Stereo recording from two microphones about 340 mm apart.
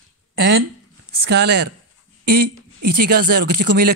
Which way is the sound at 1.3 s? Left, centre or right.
Right.